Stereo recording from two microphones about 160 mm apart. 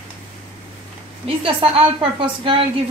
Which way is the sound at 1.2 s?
35° right (ahead or behind).